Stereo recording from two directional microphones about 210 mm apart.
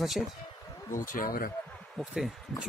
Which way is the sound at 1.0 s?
40° left (ahead or behind).